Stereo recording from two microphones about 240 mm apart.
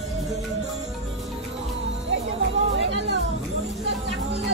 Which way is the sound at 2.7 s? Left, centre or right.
Right.